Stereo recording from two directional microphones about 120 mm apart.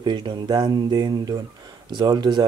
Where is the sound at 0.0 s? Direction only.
40° right (ahead or behind).